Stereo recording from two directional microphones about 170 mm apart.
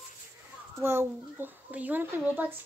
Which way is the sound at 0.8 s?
15° right (ahead or behind).